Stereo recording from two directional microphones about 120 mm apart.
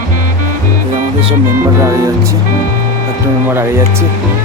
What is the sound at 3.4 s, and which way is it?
Speech, 20° right (ahead or behind).